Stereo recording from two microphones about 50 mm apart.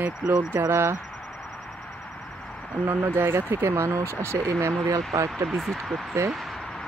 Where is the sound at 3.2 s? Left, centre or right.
Right.